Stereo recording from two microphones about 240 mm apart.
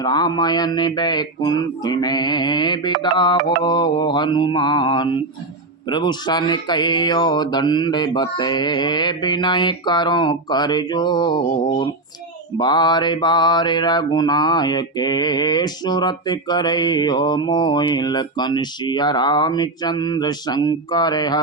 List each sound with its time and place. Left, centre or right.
0.0 s mantra: centre
12.5 s mantra: centre